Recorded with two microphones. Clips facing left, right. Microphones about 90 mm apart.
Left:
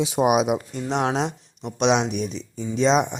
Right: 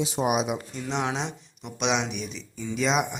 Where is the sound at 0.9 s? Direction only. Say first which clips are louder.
Left 6 dB; 40° left (ahead or behind).